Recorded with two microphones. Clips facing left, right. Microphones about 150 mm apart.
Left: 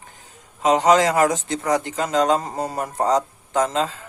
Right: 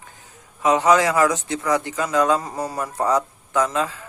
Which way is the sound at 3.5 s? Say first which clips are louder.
Even; 45° left (ahead or behind).